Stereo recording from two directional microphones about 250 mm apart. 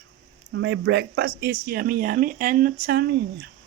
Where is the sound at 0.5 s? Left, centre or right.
Right.